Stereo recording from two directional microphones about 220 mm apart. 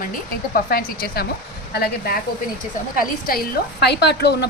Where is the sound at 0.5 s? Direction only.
40° left (ahead or behind).